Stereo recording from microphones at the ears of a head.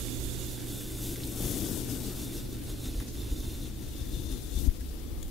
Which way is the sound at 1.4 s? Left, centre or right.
Left.